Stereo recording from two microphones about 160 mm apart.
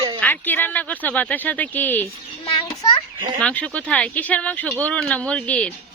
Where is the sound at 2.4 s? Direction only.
35° left (ahead or behind).